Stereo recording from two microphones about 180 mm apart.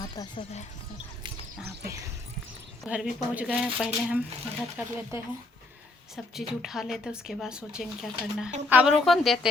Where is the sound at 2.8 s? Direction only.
5° right (ahead or behind).